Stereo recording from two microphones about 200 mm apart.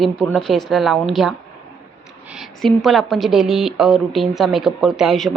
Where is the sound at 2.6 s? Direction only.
Centre (ahead or behind).